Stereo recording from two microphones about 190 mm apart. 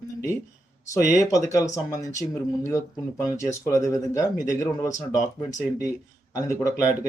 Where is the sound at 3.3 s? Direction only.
15° left (ahead or behind).